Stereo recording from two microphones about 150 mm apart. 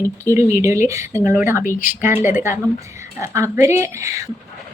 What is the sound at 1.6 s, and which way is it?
Speech, 60° left (ahead or behind).